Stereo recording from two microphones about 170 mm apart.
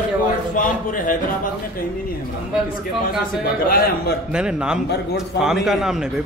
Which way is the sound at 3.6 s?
60° left (ahead or behind).